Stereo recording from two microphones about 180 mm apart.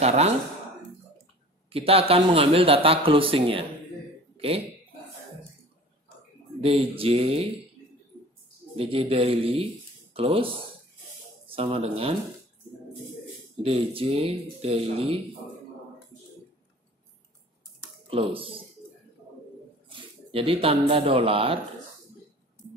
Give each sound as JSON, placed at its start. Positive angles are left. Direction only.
{"t": 0.0, "sound": "a man's voice", "side_deg": -35}
{"t": 1.7, "sound": "a man's voice", "side_deg": -35}
{"t": 6.6, "sound": "a man's voice", "side_deg": -30}
{"t": 8.7, "sound": "a man's voice", "side_deg": -30}
{"t": 13.6, "sound": "a man's voice", "side_deg": -30}
{"t": 18.1, "sound": "a man's voice", "side_deg": -30}
{"t": 19.9, "sound": "speech", "side_deg": -30}